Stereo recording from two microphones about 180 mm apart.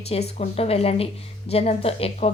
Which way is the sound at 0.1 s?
35° left (ahead or behind).